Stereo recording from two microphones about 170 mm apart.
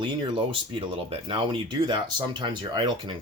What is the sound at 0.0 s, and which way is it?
Speech, 30° right (ahead or behind).